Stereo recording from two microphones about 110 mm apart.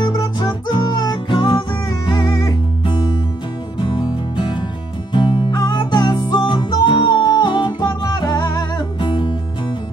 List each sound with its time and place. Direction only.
0.0 s music: 45° left (ahead or behind)